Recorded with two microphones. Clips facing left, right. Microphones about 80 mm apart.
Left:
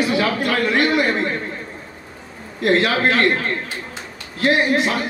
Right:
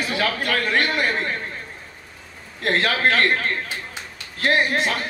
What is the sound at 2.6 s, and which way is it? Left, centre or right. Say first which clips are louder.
Speech: left 5 dB; right.